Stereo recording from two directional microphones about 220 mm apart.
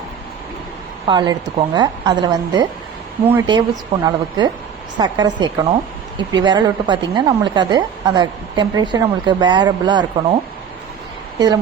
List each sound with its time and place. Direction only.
1.0 s a woman's voice: 20° right (ahead or behind)
4.9 s a woman's voice: 20° right (ahead or behind)
11.3 s speech: 20° right (ahead or behind)